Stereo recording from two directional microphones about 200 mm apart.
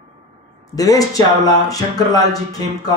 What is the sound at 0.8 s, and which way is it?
Speech, 15° left (ahead or behind).